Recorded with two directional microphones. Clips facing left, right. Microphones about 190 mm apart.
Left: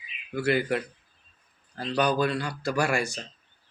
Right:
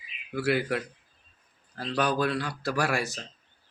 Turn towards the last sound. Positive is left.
turn(degrees=0)  # may be behind; listen again after turning